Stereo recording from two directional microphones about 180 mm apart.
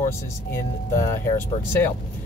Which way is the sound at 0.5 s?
15° left (ahead or behind).